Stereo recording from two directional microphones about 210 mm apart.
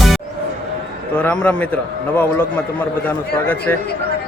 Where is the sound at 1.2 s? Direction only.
5° left (ahead or behind).